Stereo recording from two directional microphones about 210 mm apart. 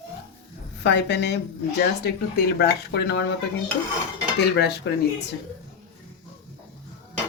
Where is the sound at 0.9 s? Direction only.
55° left (ahead or behind).